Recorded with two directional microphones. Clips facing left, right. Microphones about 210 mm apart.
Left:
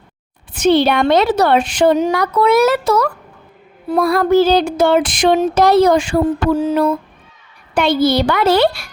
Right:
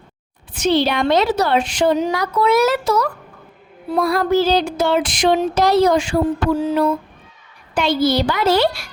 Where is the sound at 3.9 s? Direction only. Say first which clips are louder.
Left 4 dB; 55° left (ahead or behind).